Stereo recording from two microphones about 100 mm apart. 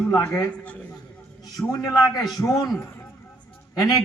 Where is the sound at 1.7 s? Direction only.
40° left (ahead or behind).